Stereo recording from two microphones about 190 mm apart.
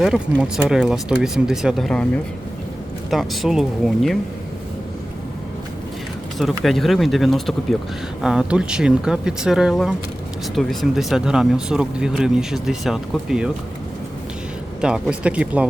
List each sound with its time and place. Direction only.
0.0 s speech: 5° right (ahead or behind)
3.1 s speech: centre (ahead or behind)
6.4 s speech: centre (ahead or behind)
14.8 s speech: 5° right (ahead or behind)